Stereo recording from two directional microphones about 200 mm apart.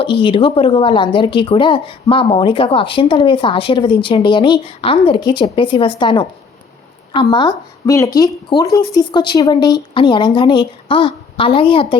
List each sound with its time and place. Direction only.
0.0 s speech: 25° left (ahead or behind)